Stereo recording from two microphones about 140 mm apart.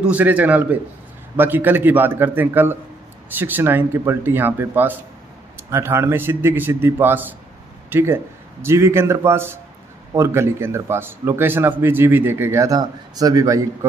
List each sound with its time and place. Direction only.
0.0 s speech: 10° right (ahead or behind)